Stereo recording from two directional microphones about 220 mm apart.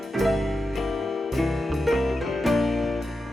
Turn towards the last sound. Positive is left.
turn(degrees=0)  # may be behind; listen again after turning